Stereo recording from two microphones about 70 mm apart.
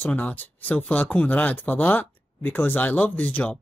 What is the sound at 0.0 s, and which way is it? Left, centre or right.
Speech, left.